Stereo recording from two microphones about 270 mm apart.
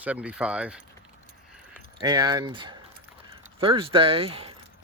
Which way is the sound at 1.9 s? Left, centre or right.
Centre.